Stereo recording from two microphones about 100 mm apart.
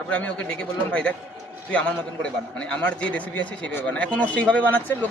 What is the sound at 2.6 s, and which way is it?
A man's voice, 10° left (ahead or behind).